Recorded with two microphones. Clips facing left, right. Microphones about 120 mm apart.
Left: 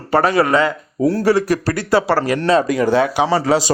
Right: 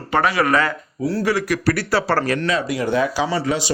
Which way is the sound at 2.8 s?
80° left.